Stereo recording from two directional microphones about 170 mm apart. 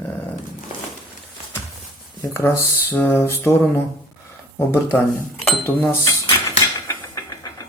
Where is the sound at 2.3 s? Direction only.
15° left (ahead or behind).